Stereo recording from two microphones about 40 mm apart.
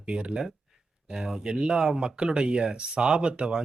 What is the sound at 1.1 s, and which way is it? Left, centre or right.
Speech, centre.